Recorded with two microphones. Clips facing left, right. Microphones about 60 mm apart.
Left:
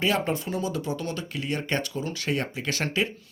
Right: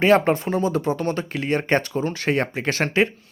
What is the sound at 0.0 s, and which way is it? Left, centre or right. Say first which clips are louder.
Speech: right 9 dB; right.